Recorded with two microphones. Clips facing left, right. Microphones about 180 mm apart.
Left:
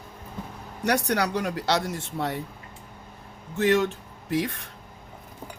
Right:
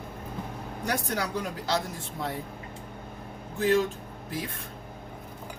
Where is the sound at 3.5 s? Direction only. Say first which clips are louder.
Left 2 dB; 75° left (ahead or behind).